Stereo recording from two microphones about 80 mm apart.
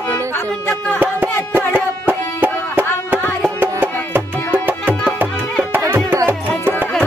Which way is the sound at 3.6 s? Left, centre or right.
Right.